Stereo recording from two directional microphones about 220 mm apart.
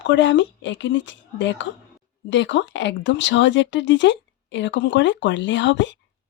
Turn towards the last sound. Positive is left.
turn(degrees=55)  # may be behind; listen again after turning